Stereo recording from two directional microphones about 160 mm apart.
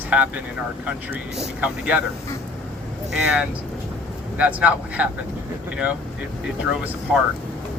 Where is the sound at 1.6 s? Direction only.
10° right (ahead or behind).